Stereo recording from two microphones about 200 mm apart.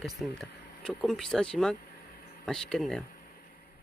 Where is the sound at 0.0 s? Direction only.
Centre (ahead or behind).